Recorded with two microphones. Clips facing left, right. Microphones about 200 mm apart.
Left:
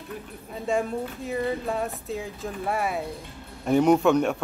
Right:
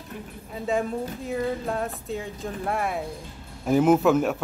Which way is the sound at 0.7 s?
Centre (ahead or behind).